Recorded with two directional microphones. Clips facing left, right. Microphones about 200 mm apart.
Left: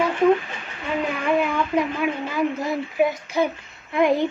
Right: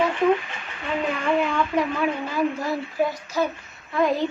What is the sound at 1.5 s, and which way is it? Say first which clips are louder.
A woman's voice: left 1 dB; 10° left (ahead or behind).